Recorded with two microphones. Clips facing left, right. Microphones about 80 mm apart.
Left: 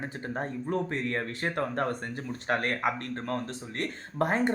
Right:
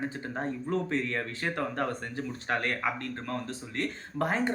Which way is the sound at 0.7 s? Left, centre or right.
Left.